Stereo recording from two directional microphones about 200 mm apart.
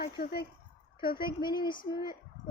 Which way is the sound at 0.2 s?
50° left (ahead or behind).